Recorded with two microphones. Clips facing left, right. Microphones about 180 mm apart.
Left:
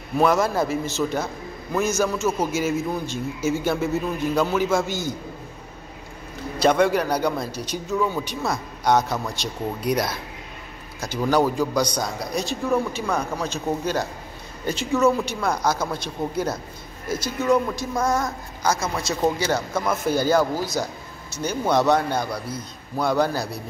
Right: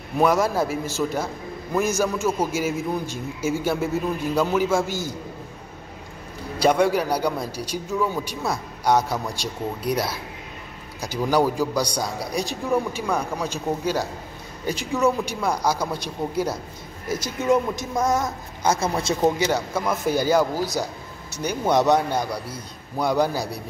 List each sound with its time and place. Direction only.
0.2 s a man's voice: 10° right (ahead or behind)
6.6 s a man's voice: 10° right (ahead or behind); by 19.1 s 25° right (ahead or behind)
19.3 s a man's voice: 15° right (ahead or behind)